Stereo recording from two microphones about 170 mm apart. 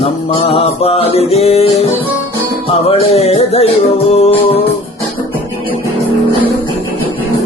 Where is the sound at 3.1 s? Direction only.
35° left (ahead or behind).